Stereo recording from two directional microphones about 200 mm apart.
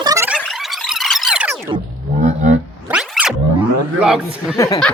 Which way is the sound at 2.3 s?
40° right (ahead or behind).